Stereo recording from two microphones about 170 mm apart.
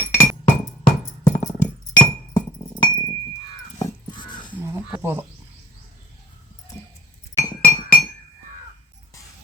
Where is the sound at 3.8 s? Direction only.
25° left (ahead or behind).